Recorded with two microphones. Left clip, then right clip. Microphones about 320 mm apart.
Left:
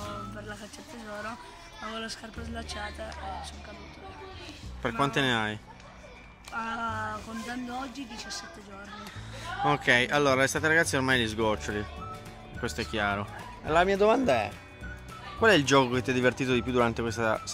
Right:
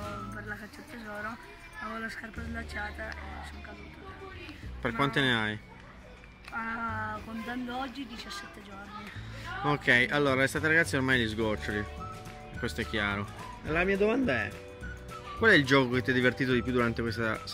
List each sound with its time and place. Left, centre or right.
2.5 s speech: centre
4.8 s speech: centre
9.7 s speech: centre
13.9 s speech: left
15.4 s speech: centre